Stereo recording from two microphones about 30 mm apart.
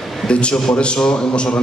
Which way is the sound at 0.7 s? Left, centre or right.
Left.